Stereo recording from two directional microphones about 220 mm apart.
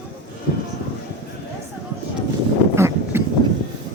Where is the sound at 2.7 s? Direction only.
10° right (ahead or behind).